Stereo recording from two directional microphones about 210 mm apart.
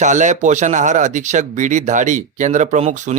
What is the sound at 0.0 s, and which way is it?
Speech, 35° right (ahead or behind).